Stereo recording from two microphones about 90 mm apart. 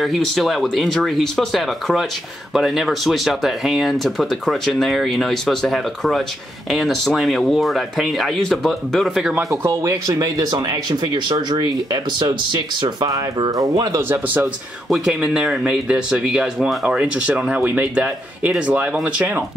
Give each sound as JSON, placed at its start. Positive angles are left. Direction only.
{"t": 0.0, "sound": "speech", "side_deg": 0}
{"t": 9.4, "sound": "speech", "side_deg": -35}
{"t": 13.5, "sound": "speech", "side_deg": -40}
{"t": 14.0, "sound": "speech", "side_deg": -20}
{"t": 14.9, "sound": "speech", "side_deg": -5}